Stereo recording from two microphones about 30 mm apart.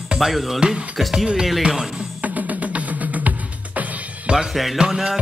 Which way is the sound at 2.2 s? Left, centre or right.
Right.